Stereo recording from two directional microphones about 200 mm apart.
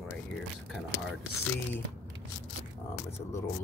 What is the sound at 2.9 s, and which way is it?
Speech, 15° left (ahead or behind).